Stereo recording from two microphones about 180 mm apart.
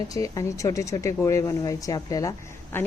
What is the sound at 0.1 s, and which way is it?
A woman's voice, 20° left (ahead or behind).